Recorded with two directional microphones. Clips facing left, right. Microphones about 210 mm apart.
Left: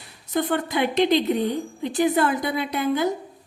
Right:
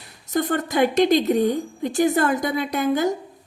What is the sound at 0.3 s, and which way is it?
A woman's voice, 45° right (ahead or behind).